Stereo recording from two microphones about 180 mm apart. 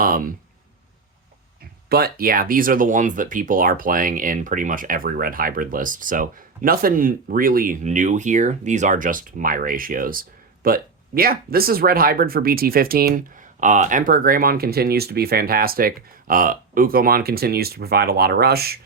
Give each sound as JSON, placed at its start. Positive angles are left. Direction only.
{"t": 0.0, "sound": "speech", "side_deg": -55}
{"t": 1.9, "sound": "speech", "side_deg": -60}